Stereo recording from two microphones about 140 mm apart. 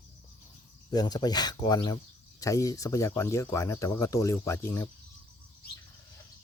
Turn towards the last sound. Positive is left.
turn(degrees=20)  # may be behind; listen again after turning